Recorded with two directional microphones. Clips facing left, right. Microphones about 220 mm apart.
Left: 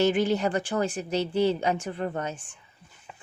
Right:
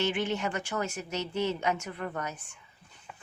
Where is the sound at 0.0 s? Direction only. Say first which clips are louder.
Left 7 dB; 40° left (ahead or behind).